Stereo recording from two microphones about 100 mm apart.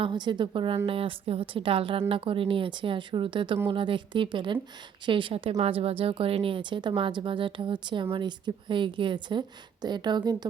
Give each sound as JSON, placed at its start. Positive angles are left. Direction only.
{"t": 0.0, "sound": "speech", "side_deg": -50}
{"t": 0.9, "sound": "speech", "side_deg": -70}